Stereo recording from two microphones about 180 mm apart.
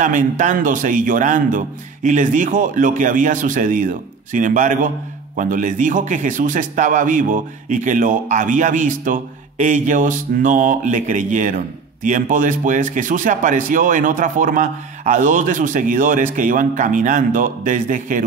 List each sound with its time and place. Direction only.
0.0 s speech: 45° right (ahead or behind)